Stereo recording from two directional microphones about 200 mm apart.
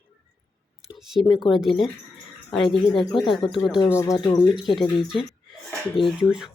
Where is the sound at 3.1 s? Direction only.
25° left (ahead or behind).